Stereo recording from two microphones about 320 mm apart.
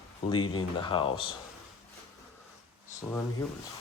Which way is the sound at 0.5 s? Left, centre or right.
Centre.